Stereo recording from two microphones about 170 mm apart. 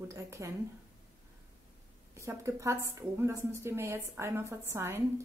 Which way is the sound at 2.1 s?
15° right (ahead or behind).